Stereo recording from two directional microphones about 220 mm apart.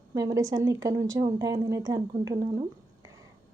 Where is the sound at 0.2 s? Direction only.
15° right (ahead or behind).